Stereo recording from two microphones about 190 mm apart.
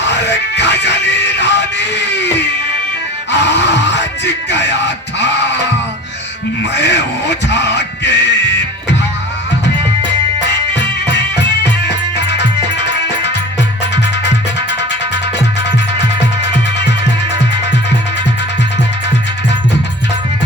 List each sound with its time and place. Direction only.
0.0 s music: 65° left (ahead or behind)
3.3 s music: 65° left (ahead or behind)
4.5 s bleat: 65° left (ahead or behind)
6.7 s music: 65° left (ahead or behind)
10.4 s music: 65° left (ahead or behind)